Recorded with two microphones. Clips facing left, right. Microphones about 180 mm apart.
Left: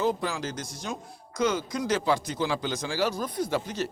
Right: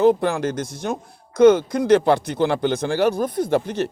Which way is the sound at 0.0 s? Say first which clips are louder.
Right 11 dB; 60° right (ahead or behind).